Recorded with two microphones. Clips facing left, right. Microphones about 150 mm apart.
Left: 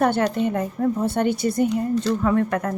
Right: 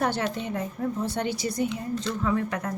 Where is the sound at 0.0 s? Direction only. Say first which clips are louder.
Left 7 dB; 55° left (ahead or behind).